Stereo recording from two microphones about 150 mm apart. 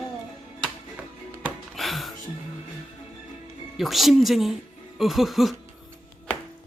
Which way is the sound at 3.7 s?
Centre (ahead or behind).